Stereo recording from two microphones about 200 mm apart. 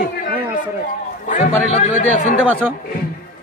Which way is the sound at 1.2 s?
40° left (ahead or behind).